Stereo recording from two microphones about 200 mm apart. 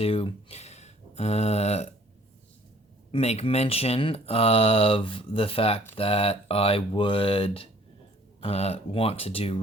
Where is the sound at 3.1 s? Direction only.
30° left (ahead or behind).